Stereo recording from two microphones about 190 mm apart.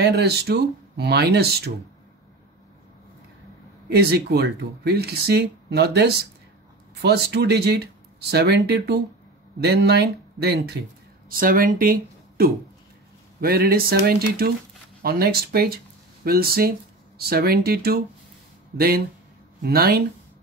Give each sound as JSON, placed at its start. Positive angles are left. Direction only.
{"t": 0.0, "sound": "speech", "side_deg": -60}
{"t": 3.9, "sound": "speech", "side_deg": -60}
{"t": 11.2, "sound": "speech", "side_deg": -50}